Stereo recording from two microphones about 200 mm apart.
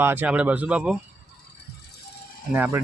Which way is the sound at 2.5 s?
10° right (ahead or behind).